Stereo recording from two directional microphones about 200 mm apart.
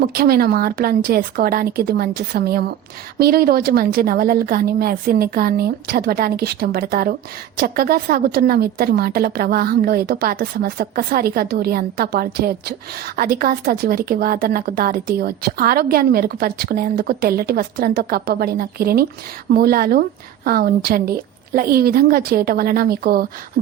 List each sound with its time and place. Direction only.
0.0 s speech: 50° right (ahead or behind)